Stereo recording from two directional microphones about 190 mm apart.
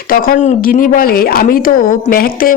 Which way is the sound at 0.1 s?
50° left (ahead or behind).